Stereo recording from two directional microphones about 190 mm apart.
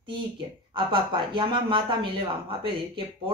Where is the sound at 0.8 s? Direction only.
25° right (ahead or behind).